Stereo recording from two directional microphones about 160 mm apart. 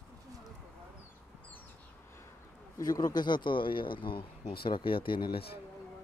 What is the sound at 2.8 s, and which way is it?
A man's voice, 25° left (ahead or behind).